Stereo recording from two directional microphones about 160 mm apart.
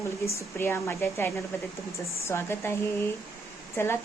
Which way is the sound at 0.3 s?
15° left (ahead or behind).